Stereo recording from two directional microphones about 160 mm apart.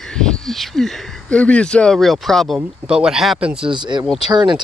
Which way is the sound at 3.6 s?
30° right (ahead or behind).